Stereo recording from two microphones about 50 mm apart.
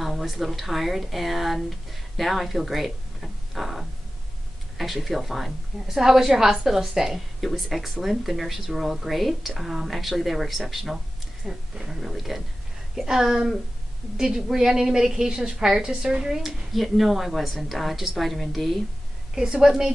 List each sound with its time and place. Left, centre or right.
0.0 s a woman's voice: centre
19.3 s a woman's voice: centre